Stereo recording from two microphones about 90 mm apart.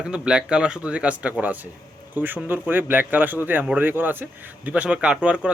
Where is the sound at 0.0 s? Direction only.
10° right (ahead or behind).